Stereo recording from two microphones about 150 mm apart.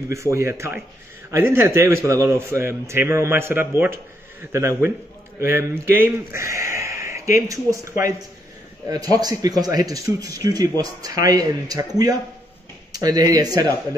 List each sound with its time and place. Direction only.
0.1 s speech: 20° right (ahead or behind)